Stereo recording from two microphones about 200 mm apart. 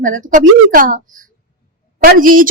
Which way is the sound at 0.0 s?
40° right (ahead or behind).